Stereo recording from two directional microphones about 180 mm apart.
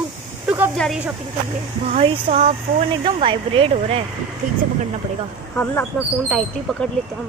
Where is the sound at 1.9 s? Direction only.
35° right (ahead or behind).